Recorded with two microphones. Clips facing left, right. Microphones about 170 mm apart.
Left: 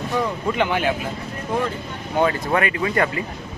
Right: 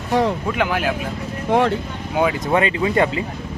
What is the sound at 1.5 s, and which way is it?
Speech, 75° right (ahead or behind).